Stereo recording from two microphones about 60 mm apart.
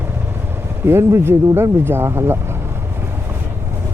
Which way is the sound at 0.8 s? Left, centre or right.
Right.